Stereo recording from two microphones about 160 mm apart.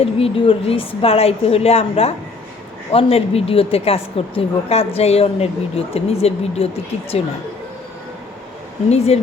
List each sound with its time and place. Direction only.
0.0 s a woman's voice: 35° left (ahead or behind)
8.9 s a woman's voice: 40° left (ahead or behind)